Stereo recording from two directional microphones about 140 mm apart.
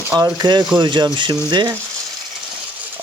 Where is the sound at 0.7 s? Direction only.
30° right (ahead or behind).